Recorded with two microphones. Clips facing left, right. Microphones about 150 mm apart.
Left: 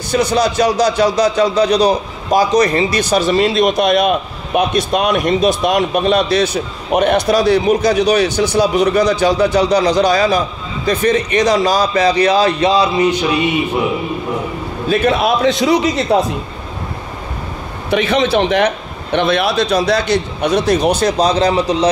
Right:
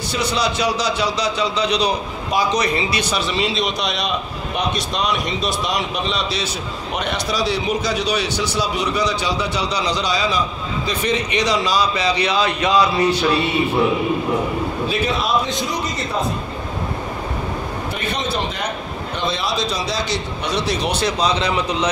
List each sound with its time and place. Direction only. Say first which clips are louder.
0.1 s a man's voice: left 8 dB; 45° left (ahead or behind); by 12.8 s 30° left (ahead or behind)
12.9 s a sound: left 3 dB; 15° left (ahead or behind)
14.9 s a man's voice: left 10 dB; 60° left (ahead or behind); by 16.2 s 80° left
17.9 s a man's voice: left 13 dB; 90° left
19.1 s a man's voice: left 9 dB; 65° left (ahead or behind); by 21.6 s 40° left (ahead or behind)